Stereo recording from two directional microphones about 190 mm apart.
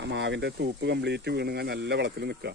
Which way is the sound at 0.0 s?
70° right (ahead or behind).